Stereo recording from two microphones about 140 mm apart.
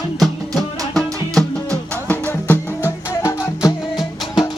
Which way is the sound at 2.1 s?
15° left (ahead or behind).